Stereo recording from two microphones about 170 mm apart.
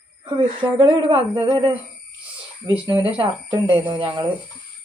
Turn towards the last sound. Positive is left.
turn(degrees=-30)  # may be behind; listen again after turning